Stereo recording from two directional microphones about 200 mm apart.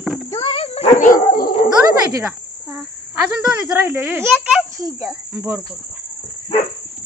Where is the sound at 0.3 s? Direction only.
25° left (ahead or behind); by 1.5 s 40° left (ahead or behind).